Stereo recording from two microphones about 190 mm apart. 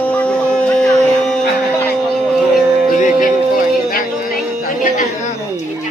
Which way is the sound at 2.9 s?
40° left (ahead or behind).